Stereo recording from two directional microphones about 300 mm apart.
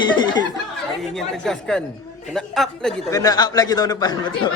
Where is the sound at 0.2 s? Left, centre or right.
Centre.